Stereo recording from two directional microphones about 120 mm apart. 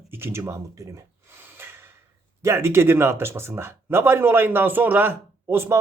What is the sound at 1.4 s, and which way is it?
Snort, 20° right (ahead or behind).